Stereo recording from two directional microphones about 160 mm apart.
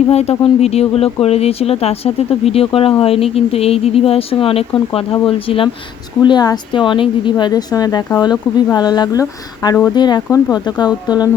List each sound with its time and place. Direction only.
0.1 s a woman's voice: 40° left (ahead or behind); by 11.3 s 25° left (ahead or behind)